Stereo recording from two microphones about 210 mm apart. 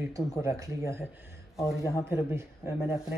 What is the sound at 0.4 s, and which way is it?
Speech, 15° right (ahead or behind).